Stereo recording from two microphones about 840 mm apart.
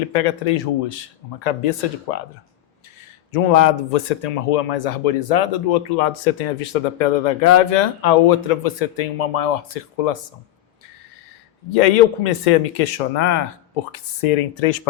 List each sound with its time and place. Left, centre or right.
0.1 s speech: left
3.3 s speech: left
11.7 s speech: left